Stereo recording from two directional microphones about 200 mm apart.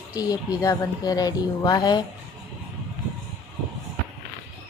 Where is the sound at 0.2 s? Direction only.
15° left (ahead or behind).